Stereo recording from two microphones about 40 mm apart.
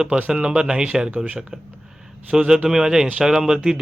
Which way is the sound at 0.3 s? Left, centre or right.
Right.